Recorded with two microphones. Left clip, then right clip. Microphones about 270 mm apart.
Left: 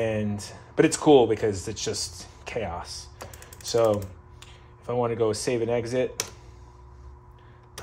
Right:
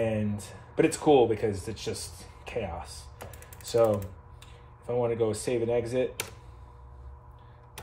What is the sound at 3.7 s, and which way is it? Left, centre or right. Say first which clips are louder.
Speech: left 2 dB; left.